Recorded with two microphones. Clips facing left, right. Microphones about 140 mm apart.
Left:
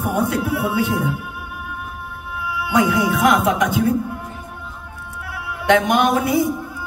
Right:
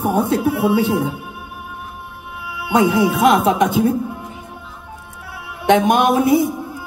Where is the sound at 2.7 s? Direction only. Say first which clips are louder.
Right 3 dB; 25° right (ahead or behind).